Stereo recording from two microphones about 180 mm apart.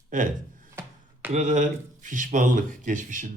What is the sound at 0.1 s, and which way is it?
Speech, 45° right (ahead or behind).